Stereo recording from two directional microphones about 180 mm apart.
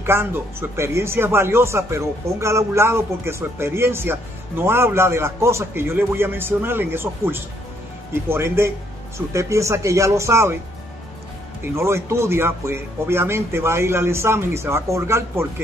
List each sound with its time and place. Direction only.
0.0 s speech: 15° right (ahead or behind)
11.6 s speech: 15° right (ahead or behind)